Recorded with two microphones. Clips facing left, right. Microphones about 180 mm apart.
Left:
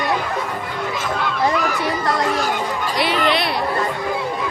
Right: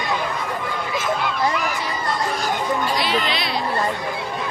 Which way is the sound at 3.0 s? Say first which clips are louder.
Left 4 dB; 60° left (ahead or behind).